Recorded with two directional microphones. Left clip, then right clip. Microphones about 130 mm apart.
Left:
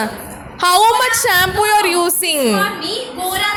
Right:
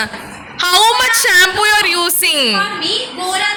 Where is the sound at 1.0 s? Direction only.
30° left (ahead or behind).